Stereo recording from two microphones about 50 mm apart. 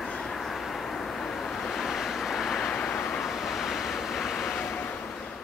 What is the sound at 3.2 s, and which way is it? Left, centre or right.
Vehicle, centre.